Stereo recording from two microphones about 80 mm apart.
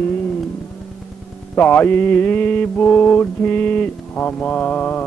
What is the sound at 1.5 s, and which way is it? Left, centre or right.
Mantra, left.